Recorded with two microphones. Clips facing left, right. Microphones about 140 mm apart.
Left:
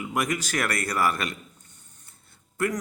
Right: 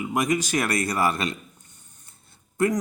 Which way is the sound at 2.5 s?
20° right (ahead or behind).